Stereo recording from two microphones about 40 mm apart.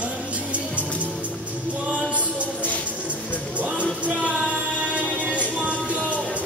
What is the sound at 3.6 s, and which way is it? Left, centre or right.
Music, right.